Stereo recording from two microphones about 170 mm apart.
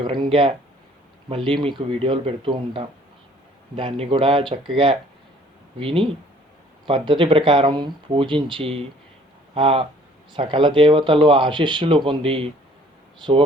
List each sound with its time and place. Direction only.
0.0 s speech: 30° right (ahead or behind)